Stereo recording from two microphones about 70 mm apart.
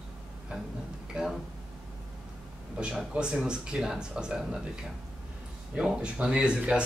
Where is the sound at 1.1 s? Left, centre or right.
Centre.